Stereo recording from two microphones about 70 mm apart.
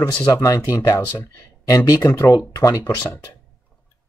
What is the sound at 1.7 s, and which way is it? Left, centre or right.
Speech, left.